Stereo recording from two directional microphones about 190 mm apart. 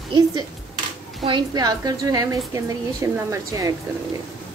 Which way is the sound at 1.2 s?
25° right (ahead or behind).